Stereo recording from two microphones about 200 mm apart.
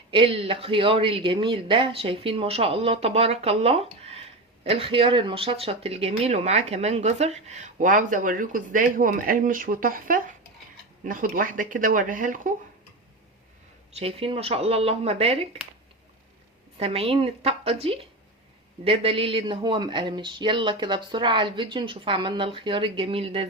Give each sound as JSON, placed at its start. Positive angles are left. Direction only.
{"t": 0.1, "sound": "speech", "side_deg": -25}
{"t": 13.9, "sound": "speech", "side_deg": -30}
{"t": 16.7, "sound": "speech", "side_deg": -30}